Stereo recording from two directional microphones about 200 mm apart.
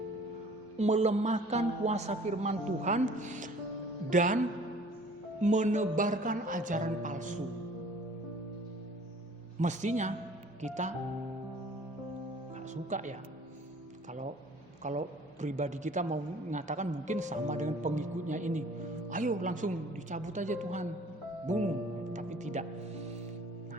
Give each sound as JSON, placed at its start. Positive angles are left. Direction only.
{"t": 0.8, "sound": "a woman's voice", "side_deg": -35}
{"t": 5.4, "sound": "a woman's voice", "side_deg": -35}
{"t": 9.6, "sound": "a woman's voice", "side_deg": -35}
{"t": 12.7, "sound": "a woman's voice", "side_deg": -35}
{"t": 14.8, "sound": "a woman's voice", "side_deg": -35}
{"t": 22.1, "sound": "music", "side_deg": -35}